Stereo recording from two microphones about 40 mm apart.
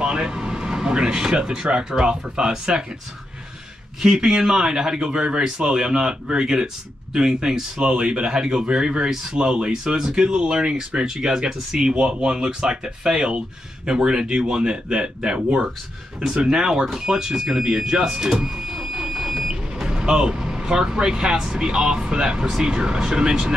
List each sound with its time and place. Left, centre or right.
0.0 s speech: right
4.0 s speech: centre